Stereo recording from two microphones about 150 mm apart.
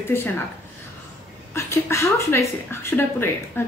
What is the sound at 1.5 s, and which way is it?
A woman's voice, 20° left (ahead or behind).